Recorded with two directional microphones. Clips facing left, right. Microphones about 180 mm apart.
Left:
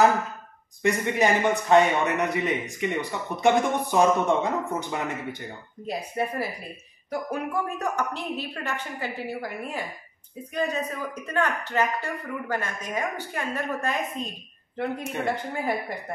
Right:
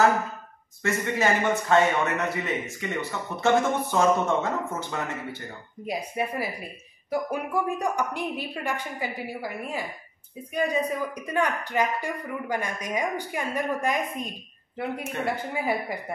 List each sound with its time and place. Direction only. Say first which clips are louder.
0.8 s a man's voice: left 2 dB; 15° left (ahead or behind)
5.9 s a woman's voice: even; 10° right (ahead or behind)
10.5 s a woman's voice: right 2 dB; 10° right (ahead or behind)
15.3 s a woman's voice: even; 10° right (ahead or behind)